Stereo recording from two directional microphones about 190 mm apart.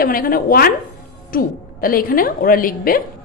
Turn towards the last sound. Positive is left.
turn(degrees=50)  # may be behind; listen again after turning